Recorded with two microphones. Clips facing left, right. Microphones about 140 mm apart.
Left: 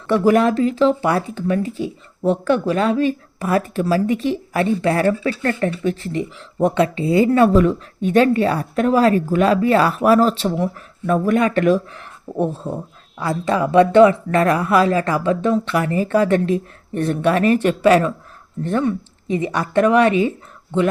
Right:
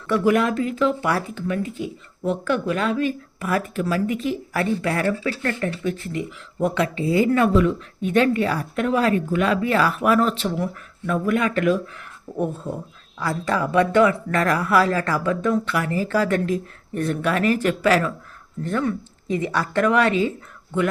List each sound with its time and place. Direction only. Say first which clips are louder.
0.1 s speech: left 4 dB; 35° left (ahead or behind)